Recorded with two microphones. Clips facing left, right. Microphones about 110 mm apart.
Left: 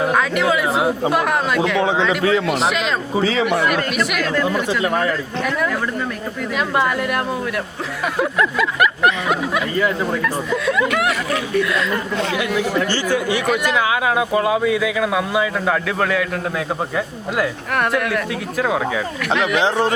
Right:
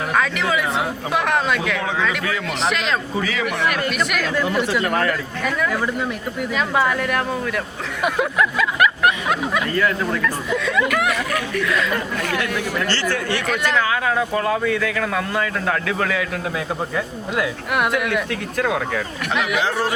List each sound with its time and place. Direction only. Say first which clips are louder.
0.1 s speech: left 3 dB; 5° left (ahead or behind)
1.8 s a man's voice: left 5 dB; 25° left (ahead or behind)
2.5 s speech: left 3 dB; centre (ahead or behind)
3.2 s a man's voice: left 5 dB; 25° left (ahead or behind)
3.8 s speech: left 2 dB; centre (ahead or behind)
9.7 s speech: left 2 dB; 20° left (ahead or behind)
10.5 s speech: left 2 dB; 5° left (ahead or behind)
11.1 s a sound: left 3 dB; 25° left (ahead or behind)
11.6 s speech: left 1 dB; centre (ahead or behind)
12.1 s speech: left 3 dB; 20° left (ahead or behind); by 19.0 s 5° left (ahead or behind)
19.6 s a man's voice: left 4 dB; 20° left (ahead or behind)